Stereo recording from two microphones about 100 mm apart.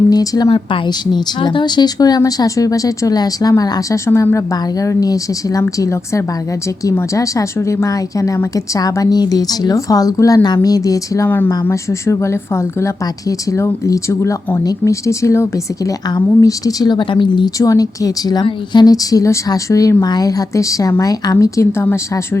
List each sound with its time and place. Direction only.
0.1 s a woman's voice: 40° left (ahead or behind)
0.4 s a woman's voice: 65° left (ahead or behind)
0.9 s a woman's voice: 45° left (ahead or behind); by 4.4 s 25° left (ahead or behind)
4.5 s a woman's voice: 35° left (ahead or behind)
11.3 s a woman's voice: 20° left (ahead or behind); by 17.5 s 50° left (ahead or behind)
17.6 s a woman's voice: 35° left (ahead or behind)